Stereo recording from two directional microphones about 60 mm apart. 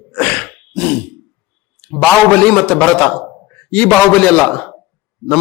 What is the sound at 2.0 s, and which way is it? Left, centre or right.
A man's voice, centre.